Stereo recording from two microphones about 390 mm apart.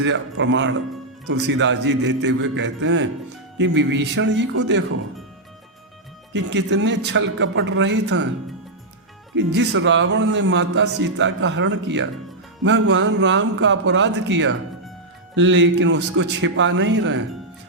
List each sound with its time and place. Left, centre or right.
0.0 s a man's voice: right
6.3 s a man's voice: right
9.6 s a man's voice: right